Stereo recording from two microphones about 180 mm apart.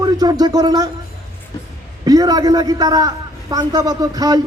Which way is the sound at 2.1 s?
20° right (ahead or behind).